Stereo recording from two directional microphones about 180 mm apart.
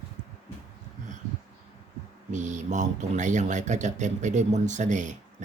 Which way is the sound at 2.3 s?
40° right (ahead or behind).